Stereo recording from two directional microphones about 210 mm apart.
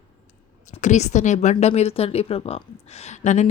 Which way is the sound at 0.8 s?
35° left (ahead or behind).